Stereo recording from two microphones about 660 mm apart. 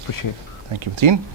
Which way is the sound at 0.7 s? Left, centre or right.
Right.